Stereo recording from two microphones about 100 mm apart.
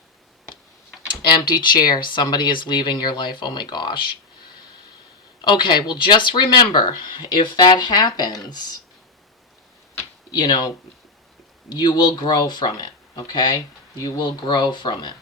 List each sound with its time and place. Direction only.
1.5 s speech: 45° left (ahead or behind)
5.4 s speech: 50° left (ahead or behind)
10.4 s speech: 50° left (ahead or behind)
11.7 s speech: 45° left (ahead or behind)